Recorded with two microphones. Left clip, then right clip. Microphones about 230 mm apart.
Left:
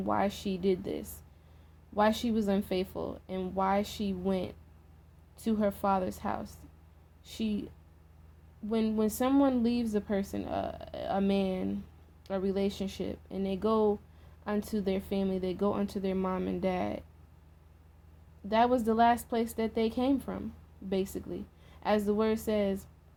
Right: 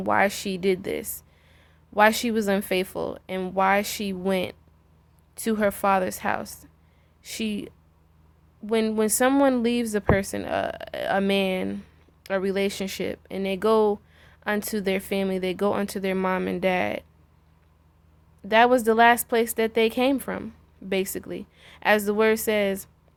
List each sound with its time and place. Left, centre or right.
0.0 s a woman's voice: right
18.4 s a woman's voice: right